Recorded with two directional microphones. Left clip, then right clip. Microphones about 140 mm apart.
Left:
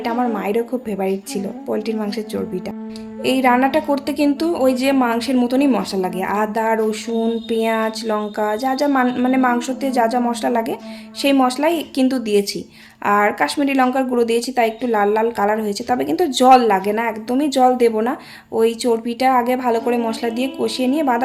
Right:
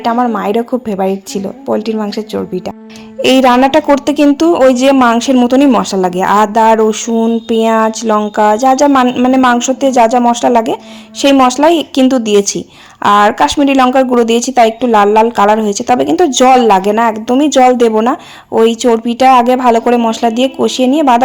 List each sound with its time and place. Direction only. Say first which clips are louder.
0.0 s speech: right 8 dB; 35° right (ahead or behind)
3.2 s speech: right 8 dB; 70° right (ahead or behind); by 8.9 s 45° right (ahead or behind)
9.0 s speech: right 8 dB; 35° right (ahead or behind)